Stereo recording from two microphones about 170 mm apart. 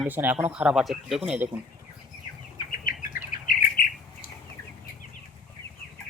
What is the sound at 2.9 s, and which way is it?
Bird, 55° left (ahead or behind).